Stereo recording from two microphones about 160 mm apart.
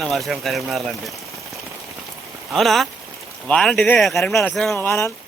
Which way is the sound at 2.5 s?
Centre (ahead or behind).